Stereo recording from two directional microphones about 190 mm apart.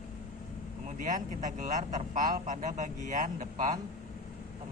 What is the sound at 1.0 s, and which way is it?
Speech, 40° right (ahead or behind).